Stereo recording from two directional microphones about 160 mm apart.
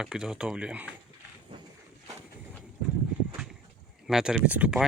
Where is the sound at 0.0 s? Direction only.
5° right (ahead or behind).